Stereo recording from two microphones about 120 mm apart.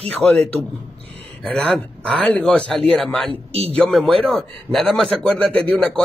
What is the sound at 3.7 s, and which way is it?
A man's voice, 5° left (ahead or behind).